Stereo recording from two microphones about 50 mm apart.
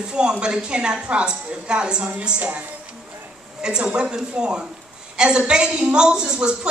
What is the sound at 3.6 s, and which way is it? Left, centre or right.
A woman's voice, centre.